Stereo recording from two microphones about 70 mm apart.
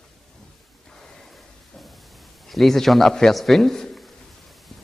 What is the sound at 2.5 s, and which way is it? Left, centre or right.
A man's voice, centre.